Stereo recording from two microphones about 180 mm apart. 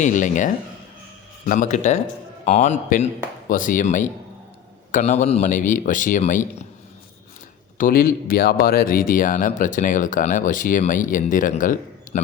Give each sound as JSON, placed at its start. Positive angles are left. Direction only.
{"t": 0.0, "sound": "a man's voice", "side_deg": 45}
{"t": 7.8, "sound": "speech", "side_deg": 50}